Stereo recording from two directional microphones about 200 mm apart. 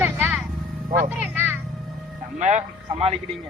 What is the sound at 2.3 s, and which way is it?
Speech, 35° right (ahead or behind).